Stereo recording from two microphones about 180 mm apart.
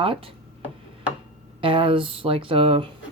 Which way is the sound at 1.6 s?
30° right (ahead or behind).